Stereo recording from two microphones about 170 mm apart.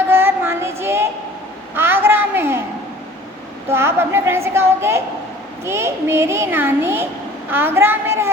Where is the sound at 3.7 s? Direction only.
15° right (ahead or behind).